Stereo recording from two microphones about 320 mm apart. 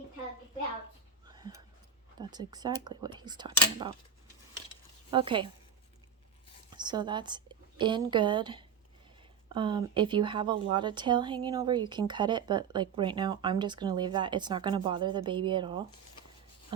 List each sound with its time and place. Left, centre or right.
1.3 s a sound: centre
2.1 s a woman's voice: centre
5.1 s a woman's voice: centre
6.7 s a woman's voice: centre